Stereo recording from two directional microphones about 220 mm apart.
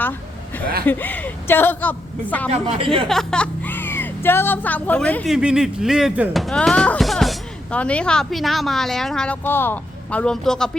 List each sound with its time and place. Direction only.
0.9 s a woman's voice: 10° left (ahead or behind)
2.5 s a woman's voice: 25° right (ahead or behind)
3.1 s a woman's voice: centre (ahead or behind)